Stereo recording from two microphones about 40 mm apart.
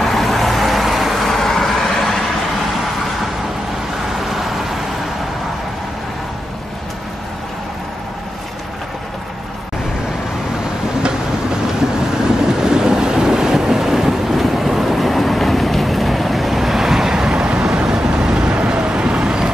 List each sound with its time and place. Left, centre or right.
0.0 s vehicle: centre
4.3 s vehicle: centre
12.4 s waves: centre